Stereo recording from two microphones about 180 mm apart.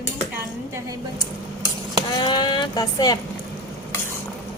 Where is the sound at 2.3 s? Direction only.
25° left (ahead or behind).